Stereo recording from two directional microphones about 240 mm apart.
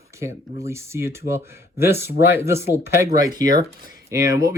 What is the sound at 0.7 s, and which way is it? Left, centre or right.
Speech, centre.